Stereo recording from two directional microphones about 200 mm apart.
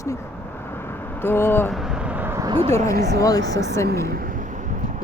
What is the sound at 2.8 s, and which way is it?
Speech, 50° right (ahead or behind).